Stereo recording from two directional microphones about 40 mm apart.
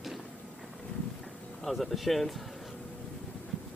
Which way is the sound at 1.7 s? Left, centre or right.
Centre.